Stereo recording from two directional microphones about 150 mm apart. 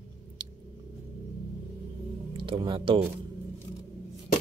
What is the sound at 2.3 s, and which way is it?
Speech, 35° right (ahead or behind).